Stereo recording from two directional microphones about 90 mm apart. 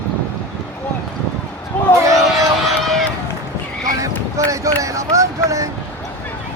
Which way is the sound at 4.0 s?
40° right (ahead or behind).